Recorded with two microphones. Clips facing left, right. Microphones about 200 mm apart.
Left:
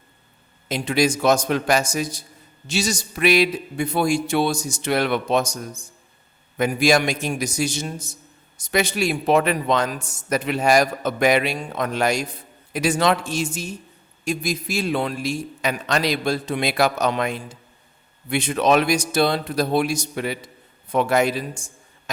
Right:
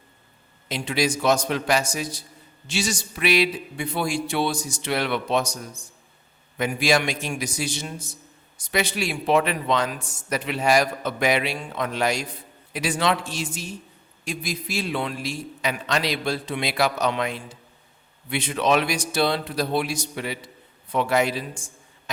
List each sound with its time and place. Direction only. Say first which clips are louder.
0.7 s a man's voice: left 4 dB; 45° left (ahead or behind)